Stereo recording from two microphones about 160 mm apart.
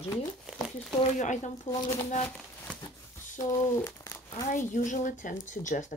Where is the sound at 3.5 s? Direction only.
15° left (ahead or behind).